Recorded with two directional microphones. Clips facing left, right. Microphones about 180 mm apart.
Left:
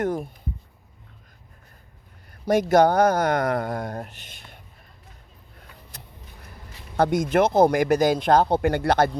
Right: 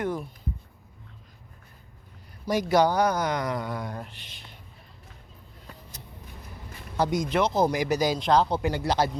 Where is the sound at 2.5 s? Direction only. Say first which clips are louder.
Left 5 dB; 50° left (ahead or behind).